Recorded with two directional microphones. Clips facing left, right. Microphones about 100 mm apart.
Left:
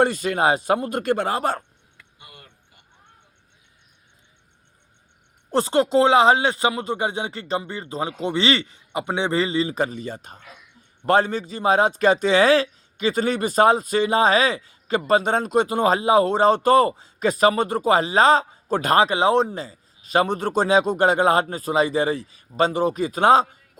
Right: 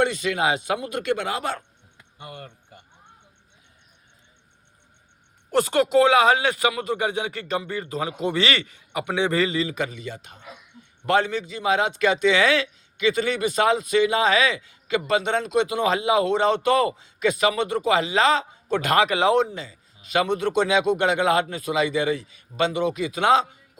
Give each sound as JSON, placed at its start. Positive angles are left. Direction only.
{"t": 0.0, "sound": "speech", "side_deg": 40}
{"t": 2.1, "sound": "speech", "side_deg": -45}
{"t": 5.5, "sound": "a man's voice", "side_deg": 30}